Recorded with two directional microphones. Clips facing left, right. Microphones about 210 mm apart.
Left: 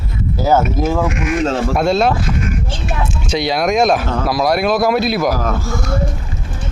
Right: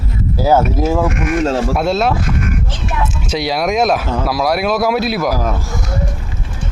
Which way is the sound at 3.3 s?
5° right (ahead or behind).